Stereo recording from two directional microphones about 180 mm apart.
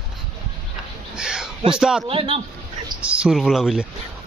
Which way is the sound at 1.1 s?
5° right (ahead or behind).